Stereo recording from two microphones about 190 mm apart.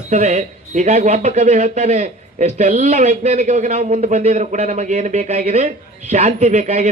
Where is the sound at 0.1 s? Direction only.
35° right (ahead or behind).